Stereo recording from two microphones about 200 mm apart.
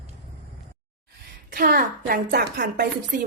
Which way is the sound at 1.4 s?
45° right (ahead or behind).